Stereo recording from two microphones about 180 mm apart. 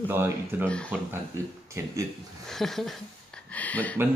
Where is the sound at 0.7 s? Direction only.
5° left (ahead or behind).